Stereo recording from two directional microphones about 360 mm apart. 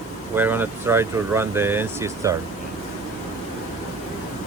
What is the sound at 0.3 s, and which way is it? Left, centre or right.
Speech, centre.